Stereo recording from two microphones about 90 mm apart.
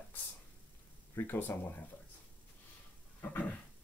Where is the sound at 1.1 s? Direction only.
25° left (ahead or behind).